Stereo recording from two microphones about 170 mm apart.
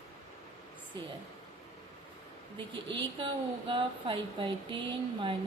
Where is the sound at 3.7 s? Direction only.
30° right (ahead or behind).